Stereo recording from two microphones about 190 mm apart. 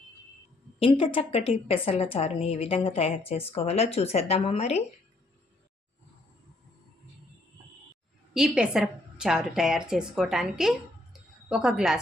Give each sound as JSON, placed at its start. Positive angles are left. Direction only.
{"t": 0.8, "sound": "a woman's voice", "side_deg": 30}
{"t": 8.3, "sound": "a woman's voice", "side_deg": -5}